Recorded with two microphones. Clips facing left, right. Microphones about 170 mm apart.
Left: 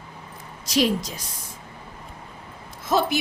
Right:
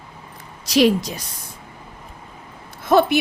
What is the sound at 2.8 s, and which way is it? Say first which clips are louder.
Speech: right 7 dB; 60° right (ahead or behind).